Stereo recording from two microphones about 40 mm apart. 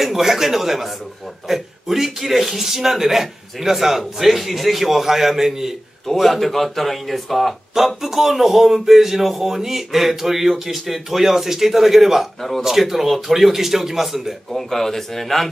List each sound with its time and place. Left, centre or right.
0.0 s speech: centre
6.1 s a man's voice: centre
12.4 s a man's voice: centre
12.6 s a man's voice: centre
14.7 s speech: centre